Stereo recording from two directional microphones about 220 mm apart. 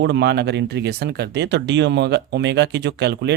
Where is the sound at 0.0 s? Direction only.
50° right (ahead or behind).